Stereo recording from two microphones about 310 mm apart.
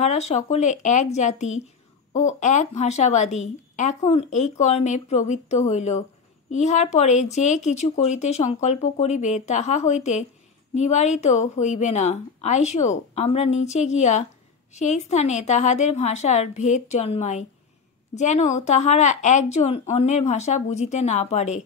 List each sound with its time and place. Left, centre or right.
0.0 s a woman's voice: left